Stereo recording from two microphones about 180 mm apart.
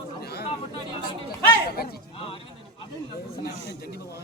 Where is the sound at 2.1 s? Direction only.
30° left (ahead or behind).